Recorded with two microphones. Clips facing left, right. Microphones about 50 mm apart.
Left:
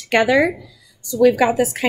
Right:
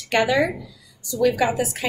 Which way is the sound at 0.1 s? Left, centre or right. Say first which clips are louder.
Left 4 dB; left.